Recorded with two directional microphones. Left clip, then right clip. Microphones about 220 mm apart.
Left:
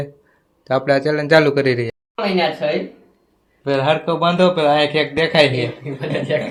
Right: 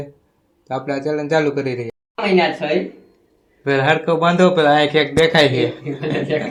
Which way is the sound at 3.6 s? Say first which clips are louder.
Right 1 dB; 5° left (ahead or behind).